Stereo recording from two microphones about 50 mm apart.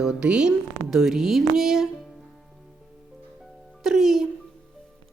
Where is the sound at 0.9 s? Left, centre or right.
Centre.